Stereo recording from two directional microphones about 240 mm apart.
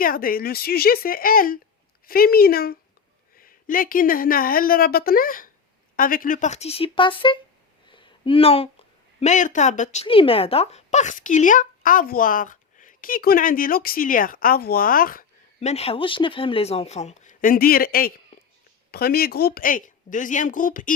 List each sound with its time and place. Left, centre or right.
0.0 s speech: left
7.9 s a sound: centre
9.2 s speech: left
15.6 s speech: left